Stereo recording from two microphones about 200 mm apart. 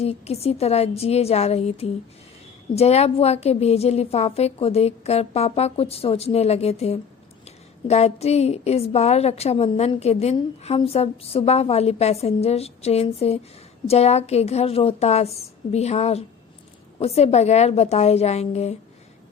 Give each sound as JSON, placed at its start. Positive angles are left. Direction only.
{"t": 0.0, "sound": "a woman's voice", "side_deg": 30}